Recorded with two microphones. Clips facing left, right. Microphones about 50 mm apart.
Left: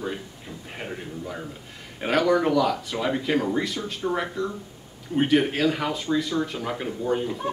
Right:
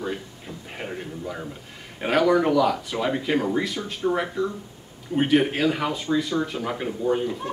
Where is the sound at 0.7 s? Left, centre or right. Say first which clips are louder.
Right 1 dB; centre.